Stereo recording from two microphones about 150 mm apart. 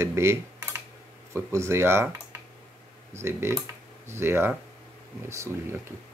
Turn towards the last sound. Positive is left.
turn(degrees=-15)  # may be behind; listen again after turning